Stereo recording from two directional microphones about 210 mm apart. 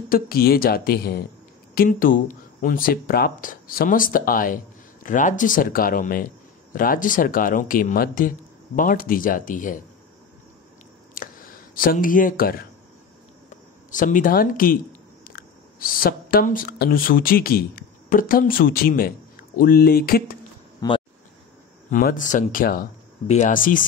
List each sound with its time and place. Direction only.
0.1 s speech: 45° left (ahead or behind)
11.2 s a sound: 40° left (ahead or behind)
11.7 s speech: 40° left (ahead or behind)
13.8 s speech: 40° left (ahead or behind)
20.8 s speech: 15° left (ahead or behind)
21.9 s speech: 40° left (ahead or behind)